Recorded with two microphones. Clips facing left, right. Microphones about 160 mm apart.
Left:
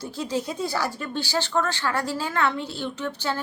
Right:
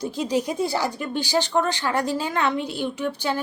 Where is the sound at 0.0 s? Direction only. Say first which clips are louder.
Right 4 dB; 15° right (ahead or behind).